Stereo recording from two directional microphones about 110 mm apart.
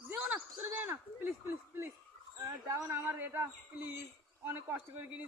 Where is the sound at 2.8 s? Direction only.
20° right (ahead or behind).